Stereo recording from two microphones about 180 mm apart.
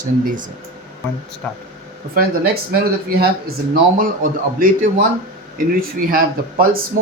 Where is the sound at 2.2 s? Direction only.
60° right (ahead or behind).